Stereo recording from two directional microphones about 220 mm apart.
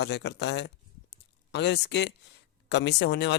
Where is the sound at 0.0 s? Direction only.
50° left (ahead or behind).